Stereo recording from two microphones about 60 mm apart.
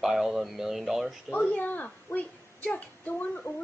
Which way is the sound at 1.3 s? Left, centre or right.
Left.